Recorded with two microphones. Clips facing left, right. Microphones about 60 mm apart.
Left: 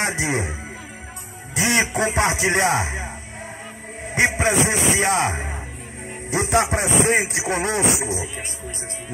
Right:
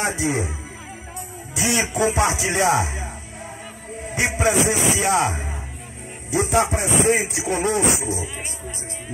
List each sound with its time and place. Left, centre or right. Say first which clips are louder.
0.0 s music: even; left
4.4 s speech: right 1 dB; left
6.5 s music: left 1 dB; left